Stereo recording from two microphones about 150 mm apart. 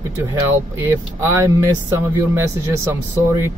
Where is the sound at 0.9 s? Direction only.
20° right (ahead or behind).